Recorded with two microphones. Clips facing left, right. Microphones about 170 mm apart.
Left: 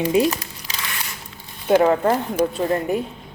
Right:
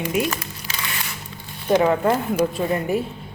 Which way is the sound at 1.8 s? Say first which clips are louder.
Left 1 dB; 25° left (ahead or behind).